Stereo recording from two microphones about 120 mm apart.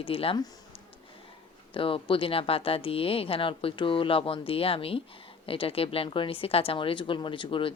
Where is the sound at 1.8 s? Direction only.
50° left (ahead or behind).